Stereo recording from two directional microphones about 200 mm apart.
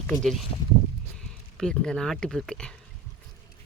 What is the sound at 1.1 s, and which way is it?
Speech, 5° left (ahead or behind).